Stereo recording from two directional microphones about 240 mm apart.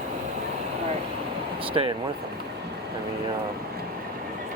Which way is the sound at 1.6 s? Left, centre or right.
Right.